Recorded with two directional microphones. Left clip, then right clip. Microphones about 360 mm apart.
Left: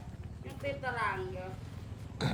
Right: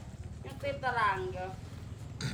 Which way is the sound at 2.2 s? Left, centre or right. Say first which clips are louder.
Left 5 dB; centre.